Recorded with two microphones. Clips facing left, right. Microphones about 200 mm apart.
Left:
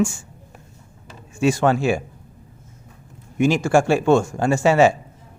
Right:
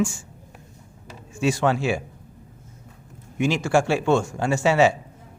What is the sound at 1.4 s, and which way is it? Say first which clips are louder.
Speech: left 4 dB; 50° left (ahead or behind).